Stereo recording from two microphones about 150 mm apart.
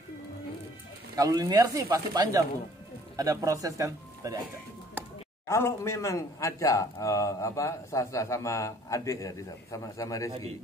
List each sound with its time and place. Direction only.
1.1 s speech: 25° right (ahead or behind)
5.5 s speech: 20° left (ahead or behind)